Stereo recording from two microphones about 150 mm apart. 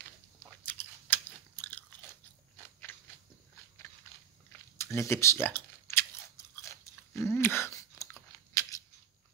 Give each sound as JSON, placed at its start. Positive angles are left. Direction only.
{"t": 0.7, "sound": "chewing", "side_deg": 10}
{"t": 2.9, "sound": "a sound", "side_deg": 15}
{"t": 4.1, "sound": "biting", "side_deg": 15}
{"t": 7.2, "sound": "chewing", "side_deg": 15}